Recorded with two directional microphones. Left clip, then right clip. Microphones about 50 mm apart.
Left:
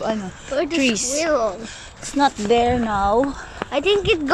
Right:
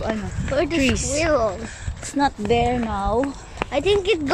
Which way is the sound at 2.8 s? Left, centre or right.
Centre.